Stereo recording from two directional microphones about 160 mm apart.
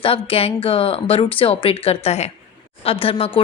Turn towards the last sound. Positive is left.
turn(degrees=35)  # may be behind; listen again after turning